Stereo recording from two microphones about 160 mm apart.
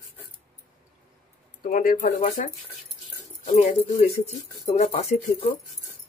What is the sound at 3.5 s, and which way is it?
Speech, 50° left (ahead or behind).